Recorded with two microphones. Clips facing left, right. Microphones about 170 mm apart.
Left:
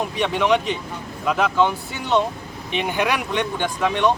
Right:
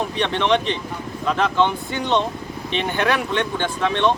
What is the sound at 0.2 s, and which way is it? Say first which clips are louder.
Speech: left 1 dB; 10° left (ahead or behind).